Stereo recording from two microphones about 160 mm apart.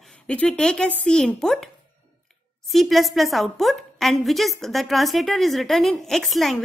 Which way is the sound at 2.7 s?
Centre (ahead or behind).